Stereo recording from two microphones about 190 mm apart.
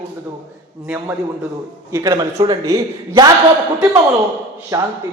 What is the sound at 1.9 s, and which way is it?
A man's voice, 15° right (ahead or behind).